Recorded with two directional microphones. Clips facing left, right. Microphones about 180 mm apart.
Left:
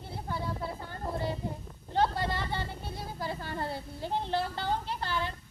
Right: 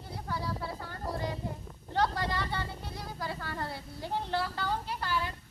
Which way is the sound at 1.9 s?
20° left (ahead or behind).